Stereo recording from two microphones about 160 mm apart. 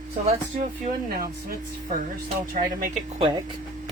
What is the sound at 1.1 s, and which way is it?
Speech, 65° right (ahead or behind).